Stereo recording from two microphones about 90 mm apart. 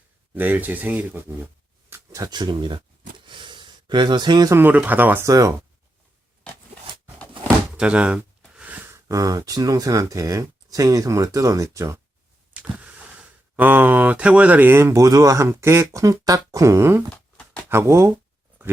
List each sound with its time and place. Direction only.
0.3 s speech: 20° right (ahead or behind)
2.2 s speech: 50° right (ahead or behind)
3.2 s a sound: 60° right (ahead or behind)
4.5 s speech: 20° right (ahead or behind)
5.2 s speech: 40° right (ahead or behind)
7.8 s speech: 10° right (ahead or behind)
8.5 s a sound: 20° right (ahead or behind)
9.0 s speech: 40° right (ahead or behind)
12.7 s speech: 15° right (ahead or behind); by 17.1 s 30° right (ahead or behind)
17.1 s a sound: 15° left (ahead or behind)
17.7 s speech: 30° right (ahead or behind)